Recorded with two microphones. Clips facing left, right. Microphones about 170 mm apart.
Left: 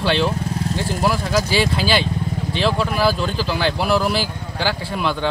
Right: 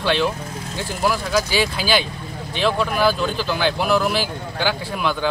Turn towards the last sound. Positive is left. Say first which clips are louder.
# left 1 dB
turn(degrees=0)  # may be behind; listen again after turning